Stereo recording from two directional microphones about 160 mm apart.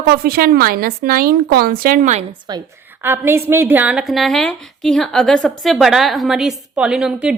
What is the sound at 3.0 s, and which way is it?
A woman's voice, 15° right (ahead or behind).